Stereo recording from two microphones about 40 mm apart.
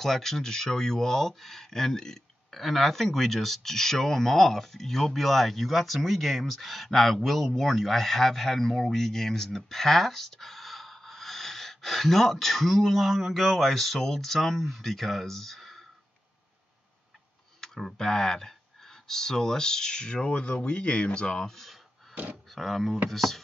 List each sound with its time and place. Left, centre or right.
0.0 s speech: centre
17.6 s tick: centre
17.9 s speech: centre
21.4 s speech: centre
22.1 s speech: right
22.5 s speech: centre